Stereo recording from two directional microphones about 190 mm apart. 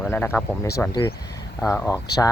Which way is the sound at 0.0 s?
10° left (ahead or behind).